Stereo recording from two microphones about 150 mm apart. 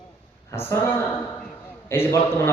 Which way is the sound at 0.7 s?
15° left (ahead or behind).